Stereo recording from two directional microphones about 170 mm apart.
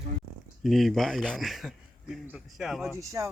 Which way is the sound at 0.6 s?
Centre (ahead or behind).